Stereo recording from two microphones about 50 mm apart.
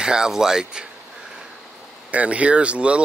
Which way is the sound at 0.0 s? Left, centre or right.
Centre.